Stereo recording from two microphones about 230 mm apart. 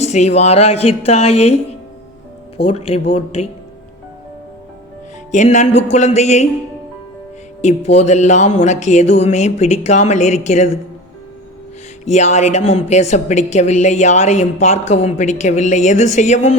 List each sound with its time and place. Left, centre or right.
0.0 s speech: left
2.6 s speech: left
5.3 s a woman's voice: left
7.6 s speech: left
12.0 s a woman's voice: left